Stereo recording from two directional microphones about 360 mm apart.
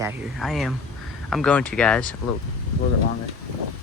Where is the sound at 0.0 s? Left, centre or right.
Centre.